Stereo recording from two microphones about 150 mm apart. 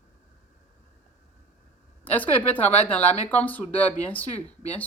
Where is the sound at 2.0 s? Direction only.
10° left (ahead or behind).